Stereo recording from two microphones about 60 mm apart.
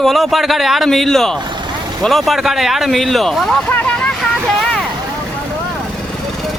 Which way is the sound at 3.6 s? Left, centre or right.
Left.